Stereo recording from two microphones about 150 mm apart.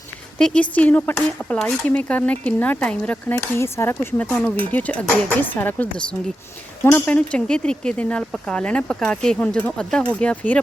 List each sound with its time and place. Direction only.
0.3 s speech: 5° left (ahead or behind)